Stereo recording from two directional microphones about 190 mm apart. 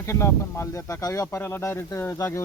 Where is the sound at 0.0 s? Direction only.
15° left (ahead or behind).